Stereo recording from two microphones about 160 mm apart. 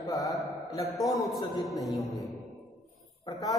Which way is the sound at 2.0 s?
20° left (ahead or behind).